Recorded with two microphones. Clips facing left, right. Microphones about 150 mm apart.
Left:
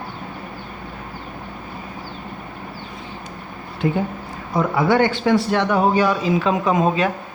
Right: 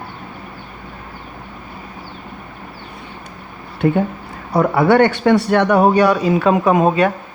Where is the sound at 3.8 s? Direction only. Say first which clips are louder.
Right 5 dB; 65° right (ahead or behind).